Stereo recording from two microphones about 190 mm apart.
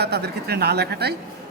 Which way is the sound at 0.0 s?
60° right (ahead or behind).